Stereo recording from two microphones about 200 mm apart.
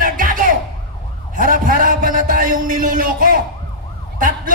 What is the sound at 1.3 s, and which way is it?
A man's voice, 45° right (ahead or behind).